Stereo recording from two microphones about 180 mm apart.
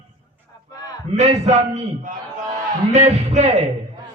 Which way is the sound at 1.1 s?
40° right (ahead or behind).